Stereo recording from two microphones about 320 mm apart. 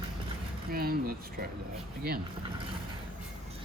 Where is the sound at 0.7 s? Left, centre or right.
Right.